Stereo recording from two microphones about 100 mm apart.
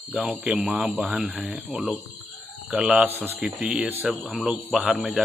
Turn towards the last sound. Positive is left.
turn(degrees=0)  # may be behind; listen again after turning